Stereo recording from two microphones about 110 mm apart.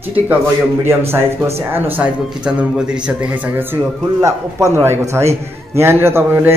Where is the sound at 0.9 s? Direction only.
20° right (ahead or behind).